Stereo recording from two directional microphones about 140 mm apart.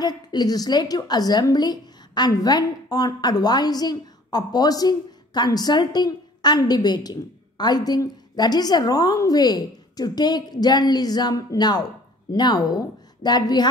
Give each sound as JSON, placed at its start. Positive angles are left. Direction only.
{"t": 0.0, "sound": "a woman's voice", "side_deg": 30}